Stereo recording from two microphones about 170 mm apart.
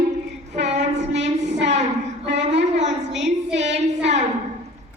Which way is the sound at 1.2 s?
90° right.